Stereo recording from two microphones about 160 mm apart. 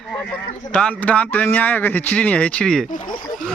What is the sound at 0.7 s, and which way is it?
Speech, 5° left (ahead or behind).